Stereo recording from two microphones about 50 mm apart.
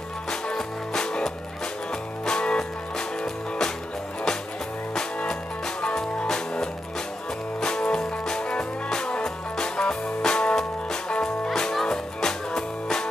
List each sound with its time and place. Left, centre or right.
0.3 s music: centre
4.9 s music: centre